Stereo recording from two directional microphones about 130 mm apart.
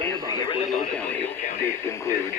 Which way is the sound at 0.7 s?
10° left (ahead or behind).